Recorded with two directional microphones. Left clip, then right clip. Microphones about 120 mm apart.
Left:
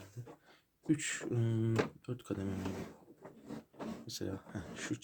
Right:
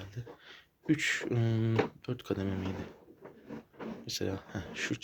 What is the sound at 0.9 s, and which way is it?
Speech, 25° right (ahead or behind).